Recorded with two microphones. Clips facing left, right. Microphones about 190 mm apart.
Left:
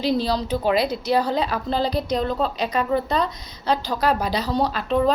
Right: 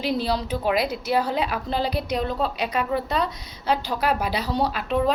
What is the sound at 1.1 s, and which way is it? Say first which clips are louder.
A woman's voice: left 2 dB; 5° right (ahead or behind).